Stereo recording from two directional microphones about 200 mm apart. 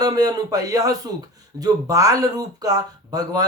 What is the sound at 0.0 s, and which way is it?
Speech, 20° right (ahead or behind).